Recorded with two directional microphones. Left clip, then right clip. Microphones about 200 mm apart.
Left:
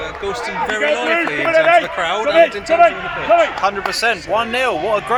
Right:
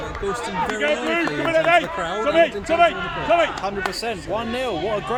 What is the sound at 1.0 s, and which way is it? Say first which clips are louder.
Speech: left 5 dB; 45° left (ahead or behind).